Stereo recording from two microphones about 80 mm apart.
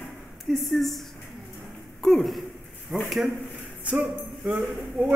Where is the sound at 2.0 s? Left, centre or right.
Centre.